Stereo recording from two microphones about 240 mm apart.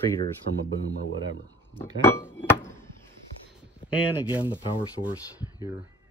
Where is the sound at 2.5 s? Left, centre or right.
Centre.